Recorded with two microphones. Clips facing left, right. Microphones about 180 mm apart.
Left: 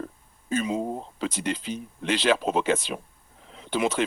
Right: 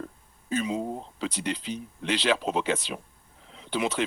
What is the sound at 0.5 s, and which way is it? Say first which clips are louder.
Speech: left 2 dB; 50° left (ahead or behind).